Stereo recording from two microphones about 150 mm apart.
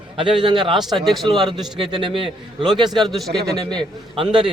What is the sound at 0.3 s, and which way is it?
Speech, 35° right (ahead or behind).